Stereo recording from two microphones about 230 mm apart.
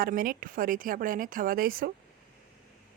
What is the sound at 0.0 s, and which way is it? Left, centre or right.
Speech, right.